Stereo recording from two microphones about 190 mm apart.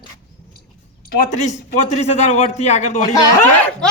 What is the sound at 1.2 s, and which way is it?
Speech, 40° left (ahead or behind).